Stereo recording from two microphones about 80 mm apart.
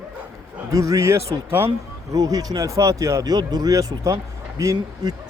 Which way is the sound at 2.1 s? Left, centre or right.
Right.